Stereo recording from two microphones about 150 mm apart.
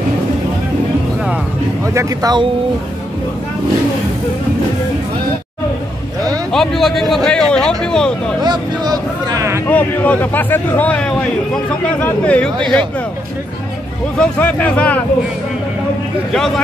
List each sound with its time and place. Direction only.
2.0 s speech: 25° right (ahead or behind)
6.5 s speech: centre (ahead or behind)
8.4 s speech: 25° right (ahead or behind)
9.7 s a man's voice: 10° left (ahead or behind)
14.1 s a man's voice: 10° left (ahead or behind)
16.3 s speech: 5° left (ahead or behind)